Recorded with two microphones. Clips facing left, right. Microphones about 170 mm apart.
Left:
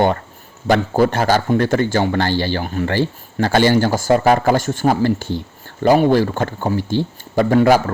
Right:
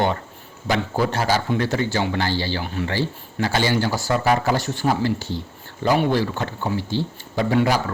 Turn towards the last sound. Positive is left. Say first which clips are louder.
# left 7 dB
turn(degrees=50)  # may be behind; listen again after turning